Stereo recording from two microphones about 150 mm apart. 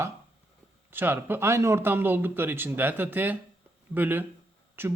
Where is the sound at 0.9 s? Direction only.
15° right (ahead or behind).